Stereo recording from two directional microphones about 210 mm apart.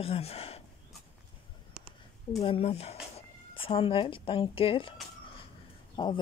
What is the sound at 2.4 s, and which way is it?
Speech, 30° left (ahead or behind).